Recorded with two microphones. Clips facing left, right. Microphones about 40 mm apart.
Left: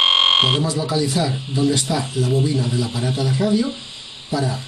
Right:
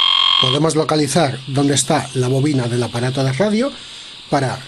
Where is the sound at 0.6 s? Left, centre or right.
Right.